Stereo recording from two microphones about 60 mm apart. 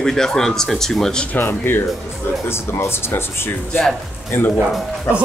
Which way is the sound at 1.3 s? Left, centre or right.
Left.